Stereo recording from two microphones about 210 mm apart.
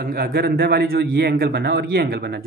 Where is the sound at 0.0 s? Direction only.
45° right (ahead or behind).